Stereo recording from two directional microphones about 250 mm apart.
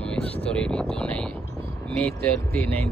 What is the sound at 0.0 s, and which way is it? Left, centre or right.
Speech, centre.